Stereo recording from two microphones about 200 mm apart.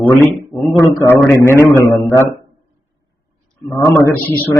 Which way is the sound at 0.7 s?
15° left (ahead or behind).